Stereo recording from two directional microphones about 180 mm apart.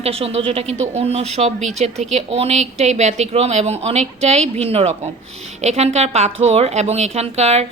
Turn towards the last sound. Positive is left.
turn(degrees=-35)  # may be behind; listen again after turning